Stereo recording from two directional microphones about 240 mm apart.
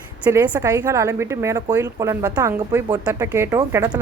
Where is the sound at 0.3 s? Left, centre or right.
Centre.